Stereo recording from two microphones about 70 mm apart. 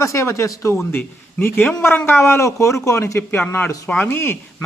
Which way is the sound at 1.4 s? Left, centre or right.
Left.